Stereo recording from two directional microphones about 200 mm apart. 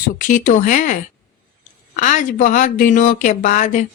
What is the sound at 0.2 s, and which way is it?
Speech, 40° left (ahead or behind).